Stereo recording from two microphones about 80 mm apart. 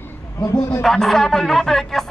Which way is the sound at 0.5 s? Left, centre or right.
Left.